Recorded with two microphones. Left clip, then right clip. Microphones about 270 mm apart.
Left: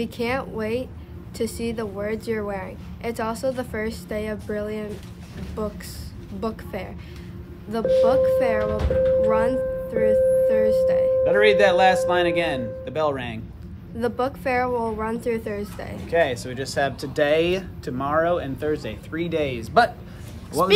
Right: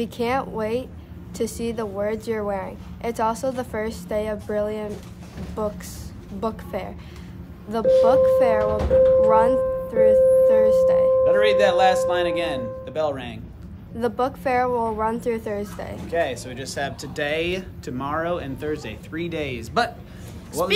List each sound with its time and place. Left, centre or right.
0.0 s a woman's voice: centre
11.2 s speech: left
13.9 s a woman's voice: centre
16.1 s speech: left; by 19.6 s centre